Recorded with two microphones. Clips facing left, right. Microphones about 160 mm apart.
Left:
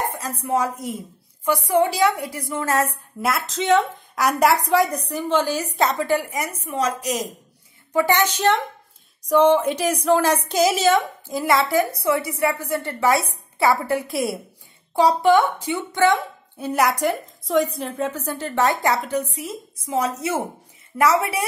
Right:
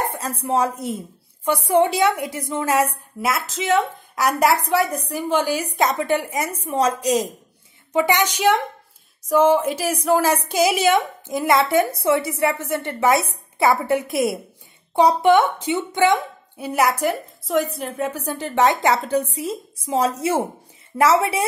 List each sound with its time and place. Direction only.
0.2 s a woman's voice: 30° right (ahead or behind)
3.2 s a woman's voice: centre (ahead or behind); by 7.2 s 30° right (ahead or behind)
7.9 s a woman's voice: 15° right (ahead or behind)
19.0 s a woman's voice: 30° right (ahead or behind)